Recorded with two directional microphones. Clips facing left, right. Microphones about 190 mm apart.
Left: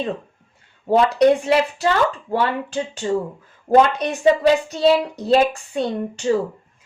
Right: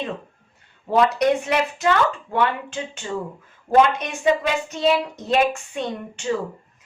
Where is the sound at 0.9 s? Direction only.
30° left (ahead or behind).